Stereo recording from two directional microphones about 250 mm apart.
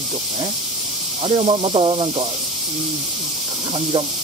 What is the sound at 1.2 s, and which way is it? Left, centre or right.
Speech, right.